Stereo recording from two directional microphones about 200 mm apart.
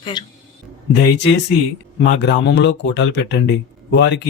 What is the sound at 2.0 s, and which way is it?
A man's voice, 60° left (ahead or behind).